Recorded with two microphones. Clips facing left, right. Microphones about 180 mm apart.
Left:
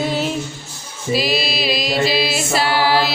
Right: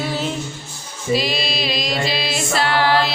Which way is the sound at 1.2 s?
5° left (ahead or behind).